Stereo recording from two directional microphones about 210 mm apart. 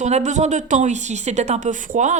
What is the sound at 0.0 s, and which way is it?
Speech, 35° right (ahead or behind).